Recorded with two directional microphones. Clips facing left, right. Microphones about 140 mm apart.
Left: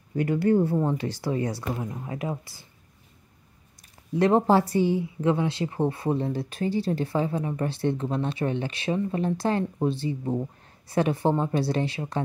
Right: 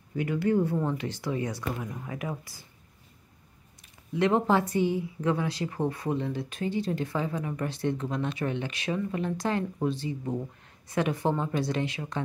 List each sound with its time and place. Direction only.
0.1 s speech: 40° left (ahead or behind)
3.8 s speech: 40° left (ahead or behind)